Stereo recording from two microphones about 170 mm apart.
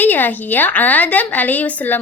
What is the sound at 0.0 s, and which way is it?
A woman's voice, 10° left (ahead or behind).